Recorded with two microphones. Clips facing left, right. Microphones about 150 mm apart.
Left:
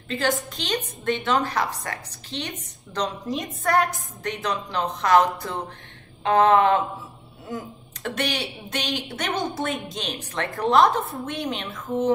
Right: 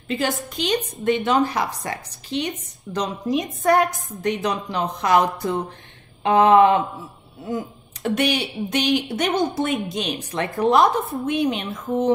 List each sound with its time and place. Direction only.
0.1 s a woman's voice: 10° right (ahead or behind)
8.0 s a woman's voice: 15° right (ahead or behind)